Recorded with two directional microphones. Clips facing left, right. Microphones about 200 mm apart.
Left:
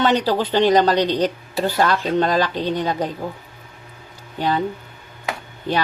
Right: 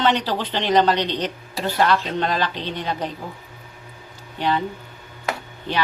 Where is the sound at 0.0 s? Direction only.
40° left (ahead or behind).